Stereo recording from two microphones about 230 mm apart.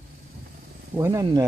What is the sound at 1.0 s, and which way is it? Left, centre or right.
Speech, centre.